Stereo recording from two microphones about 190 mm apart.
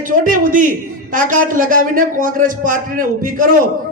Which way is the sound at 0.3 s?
45° right (ahead or behind).